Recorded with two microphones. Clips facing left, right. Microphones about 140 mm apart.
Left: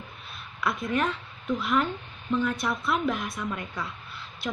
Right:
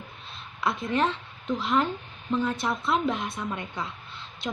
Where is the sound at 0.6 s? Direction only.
25° right (ahead or behind).